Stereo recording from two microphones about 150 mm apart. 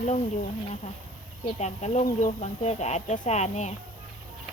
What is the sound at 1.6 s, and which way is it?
Speech, 50° left (ahead or behind).